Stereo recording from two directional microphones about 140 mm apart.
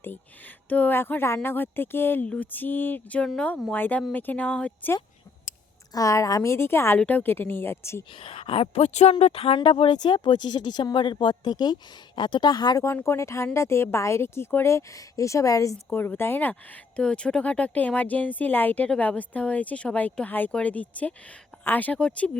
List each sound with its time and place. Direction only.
0.7 s speech: 15° left (ahead or behind)
5.9 s speech: 25° left (ahead or behind)
8.2 s speech: 40° left (ahead or behind); by 22.3 s 10° left (ahead or behind)